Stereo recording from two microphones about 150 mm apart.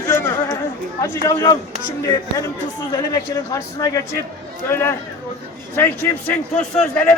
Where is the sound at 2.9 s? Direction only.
25° left (ahead or behind).